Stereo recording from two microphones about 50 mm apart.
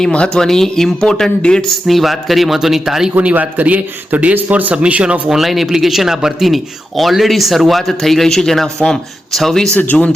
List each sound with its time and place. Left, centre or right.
0.3 s speech: centre
1.9 s speech: centre
3.2 s speech: right
4.7 s speech: right
5.3 s speech: centre
9.6 s speech: left